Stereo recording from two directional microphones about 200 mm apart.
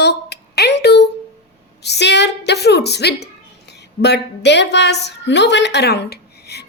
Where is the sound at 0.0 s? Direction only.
55° left (ahead or behind).